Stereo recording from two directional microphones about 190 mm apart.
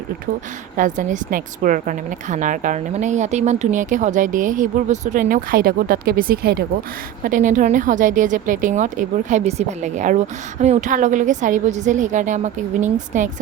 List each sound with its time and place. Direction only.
0.8 s a woman's voice: 45° right (ahead or behind)
7.3 s a woman's voice: 45° right (ahead or behind)